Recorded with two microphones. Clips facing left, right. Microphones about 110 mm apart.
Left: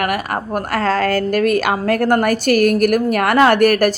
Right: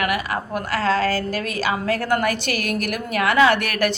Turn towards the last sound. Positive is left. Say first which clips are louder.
# left 6 dB
turn(degrees=45)  # may be behind; listen again after turning